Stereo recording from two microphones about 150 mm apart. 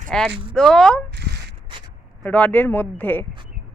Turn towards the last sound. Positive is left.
turn(degrees=10)  # may be behind; listen again after turning